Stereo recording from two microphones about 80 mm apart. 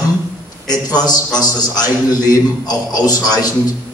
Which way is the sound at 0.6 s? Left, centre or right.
Left.